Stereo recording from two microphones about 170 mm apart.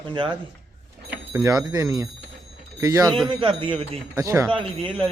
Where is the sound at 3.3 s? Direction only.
30° right (ahead or behind).